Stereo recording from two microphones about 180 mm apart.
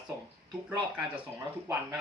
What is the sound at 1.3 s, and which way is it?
Speech, 15° right (ahead or behind).